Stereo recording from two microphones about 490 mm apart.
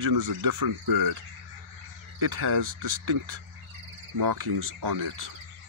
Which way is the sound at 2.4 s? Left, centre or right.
Right.